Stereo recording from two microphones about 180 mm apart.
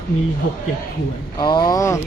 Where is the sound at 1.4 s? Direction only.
25° left (ahead or behind).